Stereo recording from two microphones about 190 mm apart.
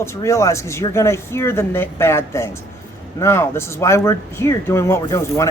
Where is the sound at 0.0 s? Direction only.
15° left (ahead or behind).